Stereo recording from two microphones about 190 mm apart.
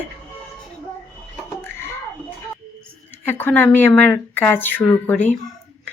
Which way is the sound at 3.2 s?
10° left (ahead or behind).